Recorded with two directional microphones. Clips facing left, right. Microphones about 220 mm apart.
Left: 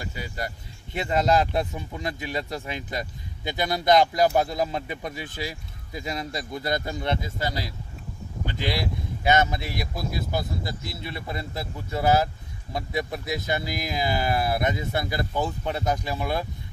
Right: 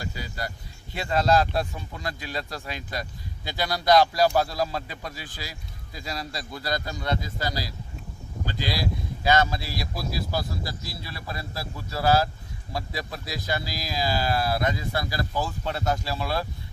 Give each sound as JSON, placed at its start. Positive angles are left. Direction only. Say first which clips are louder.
{"t": 0.0, "sound": "speech", "louder": "left 1 dB", "side_deg": 20}